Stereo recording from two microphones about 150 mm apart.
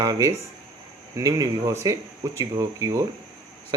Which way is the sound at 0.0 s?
25° right (ahead or behind).